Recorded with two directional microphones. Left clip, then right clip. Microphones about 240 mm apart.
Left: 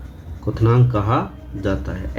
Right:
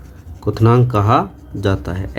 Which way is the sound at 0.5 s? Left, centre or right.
Right.